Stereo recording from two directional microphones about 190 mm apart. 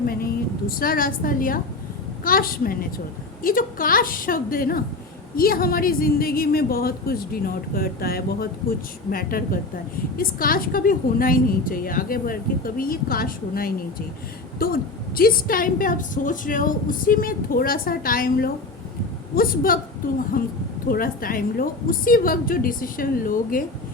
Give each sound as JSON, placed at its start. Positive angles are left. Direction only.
{"t": 0.0, "sound": "a woman's voice", "side_deg": 50}